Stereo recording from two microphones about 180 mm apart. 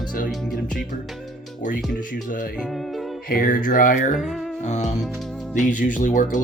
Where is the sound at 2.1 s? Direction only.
50° left (ahead or behind).